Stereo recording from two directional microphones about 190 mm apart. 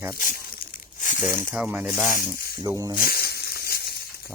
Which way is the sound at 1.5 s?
5° right (ahead or behind).